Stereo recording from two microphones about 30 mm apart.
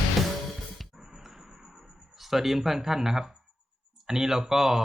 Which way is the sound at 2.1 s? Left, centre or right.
Centre.